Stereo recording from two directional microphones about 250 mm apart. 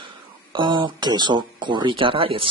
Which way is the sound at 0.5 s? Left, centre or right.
Centre.